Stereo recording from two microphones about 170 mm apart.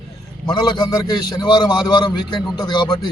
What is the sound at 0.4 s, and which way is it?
A man's voice, 25° left (ahead or behind).